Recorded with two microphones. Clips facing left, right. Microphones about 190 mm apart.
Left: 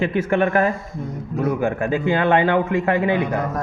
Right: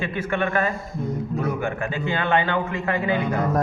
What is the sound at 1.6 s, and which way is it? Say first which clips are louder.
Speech: left 5 dB; 35° left (ahead or behind).